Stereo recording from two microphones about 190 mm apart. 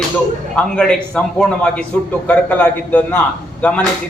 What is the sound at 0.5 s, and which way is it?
A man's voice, 5° left (ahead or behind).